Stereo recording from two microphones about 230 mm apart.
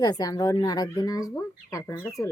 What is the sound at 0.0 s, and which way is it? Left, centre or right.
Speech, centre.